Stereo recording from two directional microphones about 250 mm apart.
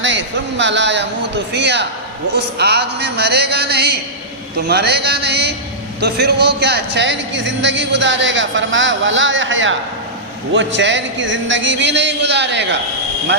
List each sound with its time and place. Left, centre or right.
0.0 s a man's voice: right